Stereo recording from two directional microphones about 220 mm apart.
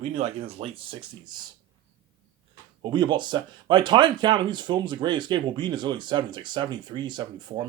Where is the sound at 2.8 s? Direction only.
20° right (ahead or behind).